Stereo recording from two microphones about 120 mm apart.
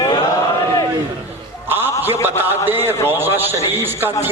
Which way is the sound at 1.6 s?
15° right (ahead or behind).